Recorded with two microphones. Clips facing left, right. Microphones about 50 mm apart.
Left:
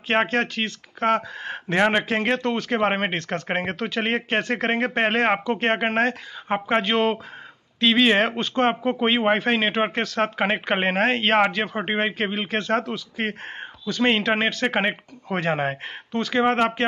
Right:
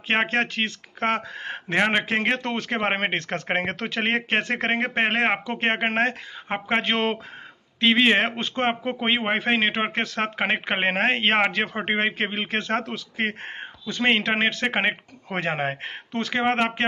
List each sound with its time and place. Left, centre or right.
0.1 s speech: right
1.8 s speech: centre
2.0 s speech: right
7.8 s speech: right
13.2 s speech: right